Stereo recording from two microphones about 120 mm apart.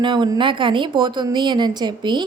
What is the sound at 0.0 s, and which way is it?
A woman's voice, 40° right (ahead or behind).